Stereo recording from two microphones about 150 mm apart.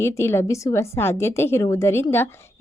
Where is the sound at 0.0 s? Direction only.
15° left (ahead or behind).